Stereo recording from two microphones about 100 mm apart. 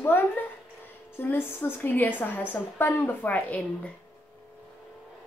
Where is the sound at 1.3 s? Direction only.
20° left (ahead or behind).